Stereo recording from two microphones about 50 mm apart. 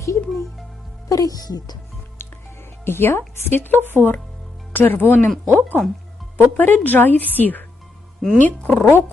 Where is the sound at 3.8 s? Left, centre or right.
Right.